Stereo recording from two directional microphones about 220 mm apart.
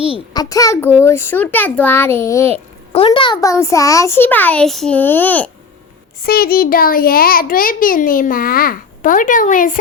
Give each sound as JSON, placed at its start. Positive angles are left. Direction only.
{"t": 0.1, "sound": "a child's voice", "side_deg": 15}
{"t": 2.9, "sound": "a child's voice", "side_deg": 25}
{"t": 6.2, "sound": "a child's voice", "side_deg": 45}